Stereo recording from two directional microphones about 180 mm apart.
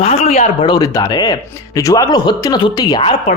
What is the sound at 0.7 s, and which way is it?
A man's voice, 20° left (ahead or behind).